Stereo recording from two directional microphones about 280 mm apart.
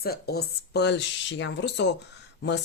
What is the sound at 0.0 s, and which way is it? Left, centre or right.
Speech, left.